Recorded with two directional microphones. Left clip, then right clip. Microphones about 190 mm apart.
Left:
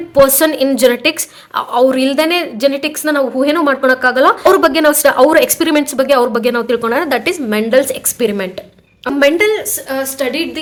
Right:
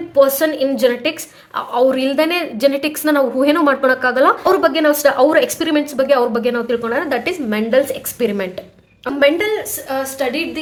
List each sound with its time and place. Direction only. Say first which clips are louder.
0.1 s a woman's voice: left 3 dB; 30° left (ahead or behind); by 4.4 s 15° left (ahead or behind)
4.4 s a woman's voice: left 4 dB; 25° left (ahead or behind)